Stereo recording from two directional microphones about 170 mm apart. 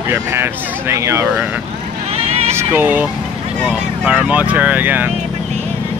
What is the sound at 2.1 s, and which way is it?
Vehicle, 35° right (ahead or behind).